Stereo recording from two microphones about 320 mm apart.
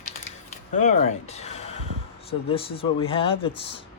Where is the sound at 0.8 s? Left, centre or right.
Centre.